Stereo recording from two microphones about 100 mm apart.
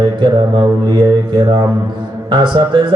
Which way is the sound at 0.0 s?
50° right (ahead or behind).